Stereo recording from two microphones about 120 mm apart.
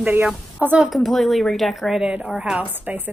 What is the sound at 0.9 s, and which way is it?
A woman's voice, centre (ahead or behind).